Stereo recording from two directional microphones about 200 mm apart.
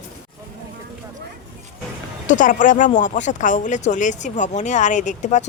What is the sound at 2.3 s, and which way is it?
Speech, 40° left (ahead or behind).